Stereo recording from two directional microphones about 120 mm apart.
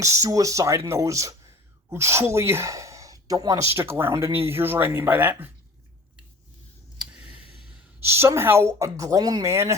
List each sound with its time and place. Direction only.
0.0 s speech: 25° right (ahead or behind)
7.0 s a sound: 10° right (ahead or behind)
8.0 s speech: 20° right (ahead or behind)